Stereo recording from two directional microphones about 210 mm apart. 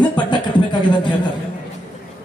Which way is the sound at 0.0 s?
20° left (ahead or behind).